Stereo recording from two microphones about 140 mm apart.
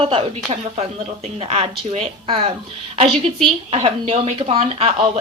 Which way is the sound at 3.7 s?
45° right (ahead or behind).